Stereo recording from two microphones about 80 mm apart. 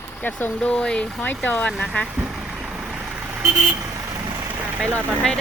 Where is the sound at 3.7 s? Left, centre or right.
Right.